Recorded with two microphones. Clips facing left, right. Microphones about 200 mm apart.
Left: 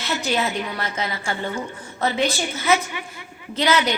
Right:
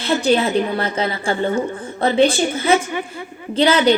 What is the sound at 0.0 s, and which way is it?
A woman's voice, 30° right (ahead or behind).